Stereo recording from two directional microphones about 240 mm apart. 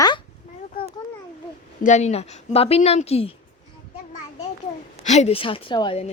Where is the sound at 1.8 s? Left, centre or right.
Left.